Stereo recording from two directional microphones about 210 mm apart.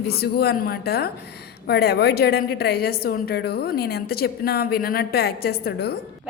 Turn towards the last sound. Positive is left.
turn(degrees=50)  # may be behind; listen again after turning